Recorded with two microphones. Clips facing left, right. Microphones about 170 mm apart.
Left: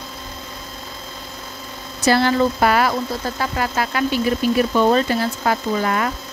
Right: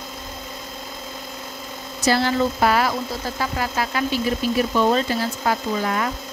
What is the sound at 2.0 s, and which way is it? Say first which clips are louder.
Speech: left 3 dB; 60° left (ahead or behind).